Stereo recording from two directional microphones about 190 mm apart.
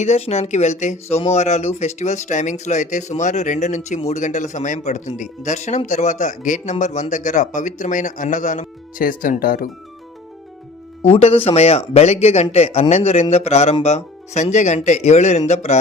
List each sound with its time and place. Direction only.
0.0 s speech: 35° left (ahead or behind)
11.2 s speech: 30° left (ahead or behind)